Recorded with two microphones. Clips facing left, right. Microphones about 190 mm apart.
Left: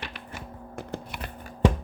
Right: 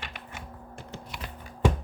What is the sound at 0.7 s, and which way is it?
Computer keyboard, 60° left (ahead or behind).